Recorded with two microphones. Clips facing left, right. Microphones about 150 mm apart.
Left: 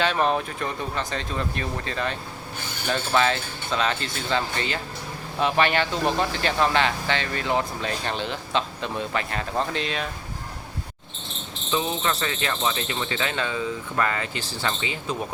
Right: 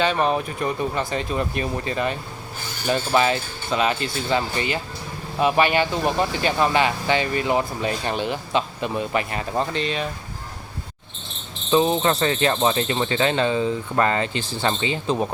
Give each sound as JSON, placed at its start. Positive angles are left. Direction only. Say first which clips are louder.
{"t": 0.0, "sound": "speech", "louder": "right 2 dB", "side_deg": 0}
{"t": 11.7, "sound": "speech", "louder": "right 7 dB", "side_deg": -35}